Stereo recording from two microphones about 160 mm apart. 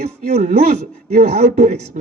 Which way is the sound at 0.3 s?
40° right (ahead or behind).